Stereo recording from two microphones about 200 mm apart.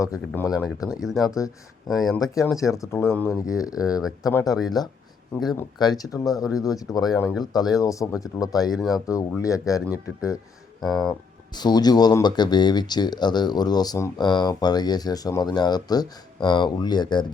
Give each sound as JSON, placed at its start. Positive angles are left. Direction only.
{"t": 0.3, "sound": "speech", "side_deg": 10}
{"t": 1.9, "sound": "speech", "side_deg": 0}
{"t": 2.1, "sound": "speech", "side_deg": 15}
{"t": 10.8, "sound": "speech", "side_deg": 0}
{"t": 11.5, "sound": "speech", "side_deg": 20}